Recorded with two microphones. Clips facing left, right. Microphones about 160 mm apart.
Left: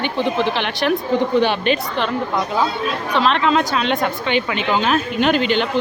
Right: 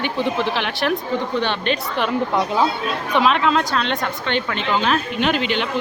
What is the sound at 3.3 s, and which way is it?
A woman's voice, 5° right (ahead or behind).